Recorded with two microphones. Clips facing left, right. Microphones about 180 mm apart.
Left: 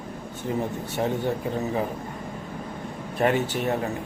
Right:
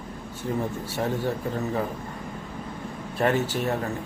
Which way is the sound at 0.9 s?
20° left (ahead or behind).